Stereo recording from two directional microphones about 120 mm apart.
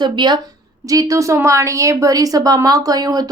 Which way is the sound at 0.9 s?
30° right (ahead or behind).